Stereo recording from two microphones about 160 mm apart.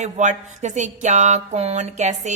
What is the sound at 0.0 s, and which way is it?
A woman's voice, 45° right (ahead or behind).